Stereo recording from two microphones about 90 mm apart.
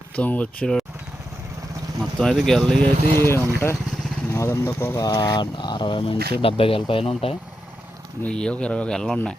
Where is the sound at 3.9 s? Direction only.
5° left (ahead or behind).